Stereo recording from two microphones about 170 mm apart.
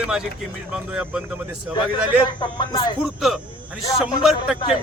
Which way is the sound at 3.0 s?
Centre (ahead or behind).